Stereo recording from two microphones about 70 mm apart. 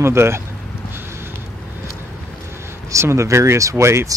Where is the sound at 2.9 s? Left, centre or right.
Right.